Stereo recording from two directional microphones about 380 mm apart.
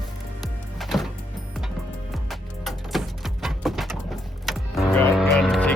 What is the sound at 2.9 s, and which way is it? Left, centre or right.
Music, centre.